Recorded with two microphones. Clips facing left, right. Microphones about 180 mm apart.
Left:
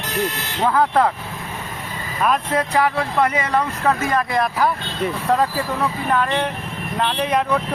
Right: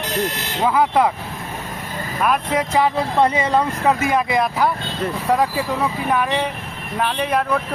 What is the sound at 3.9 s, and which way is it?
Speech, 10° right (ahead or behind).